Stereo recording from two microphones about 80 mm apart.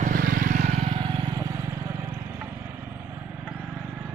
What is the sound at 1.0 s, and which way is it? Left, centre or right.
Vehicle, right.